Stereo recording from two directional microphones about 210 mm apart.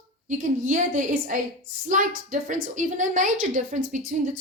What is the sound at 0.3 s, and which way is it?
A woman's voice, 40° right (ahead or behind).